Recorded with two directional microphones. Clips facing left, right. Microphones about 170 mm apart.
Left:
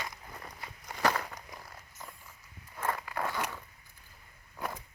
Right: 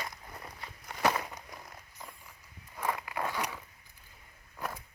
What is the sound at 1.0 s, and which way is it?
Walk, 10° right (ahead or behind).